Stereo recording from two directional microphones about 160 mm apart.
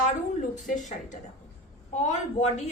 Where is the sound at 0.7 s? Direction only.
50° left (ahead or behind).